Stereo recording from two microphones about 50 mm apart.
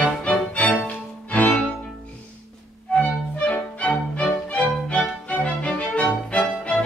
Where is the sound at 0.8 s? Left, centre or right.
Left.